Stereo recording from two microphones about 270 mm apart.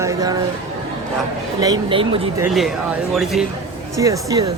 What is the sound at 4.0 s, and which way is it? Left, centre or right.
Speech, centre.